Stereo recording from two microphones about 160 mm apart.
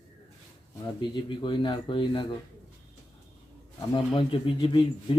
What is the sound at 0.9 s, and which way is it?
A man's voice, 30° left (ahead or behind).